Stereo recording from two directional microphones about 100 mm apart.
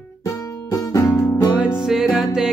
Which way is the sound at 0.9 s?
25° left (ahead or behind).